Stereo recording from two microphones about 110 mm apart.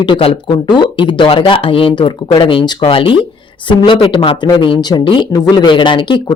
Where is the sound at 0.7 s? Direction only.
45° left (ahead or behind).